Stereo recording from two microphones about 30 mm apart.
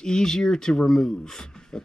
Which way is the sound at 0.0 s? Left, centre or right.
Left.